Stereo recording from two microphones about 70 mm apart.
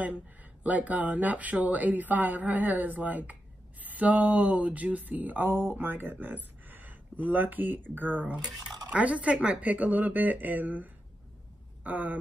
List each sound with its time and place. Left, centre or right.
0.7 s speech: right